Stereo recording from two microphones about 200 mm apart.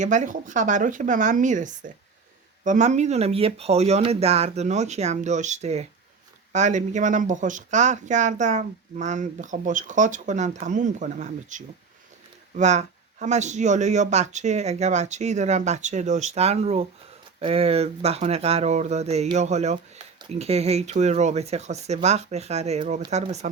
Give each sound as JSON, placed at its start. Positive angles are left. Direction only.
{"t": 0.0, "sound": "speech", "side_deg": -40}